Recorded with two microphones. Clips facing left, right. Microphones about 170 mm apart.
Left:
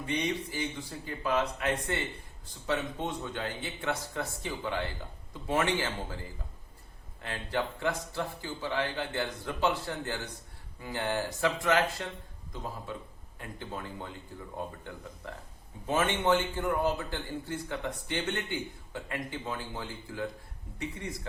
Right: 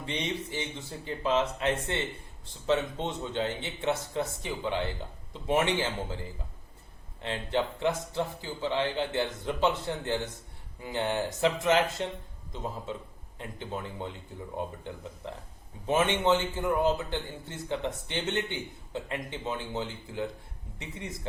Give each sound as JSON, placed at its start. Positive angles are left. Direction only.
{"t": 0.0, "sound": "a man's voice", "side_deg": -25}
{"t": 7.2, "sound": "a man's voice", "side_deg": -20}